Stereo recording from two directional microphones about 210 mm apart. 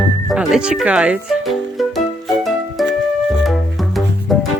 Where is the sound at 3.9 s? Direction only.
Centre (ahead or behind).